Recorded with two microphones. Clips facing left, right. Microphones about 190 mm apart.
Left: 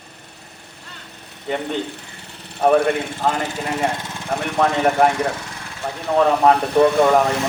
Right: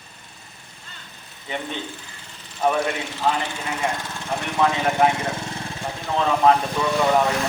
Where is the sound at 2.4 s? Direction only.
65° left (ahead or behind); by 3.5 s 45° left (ahead or behind).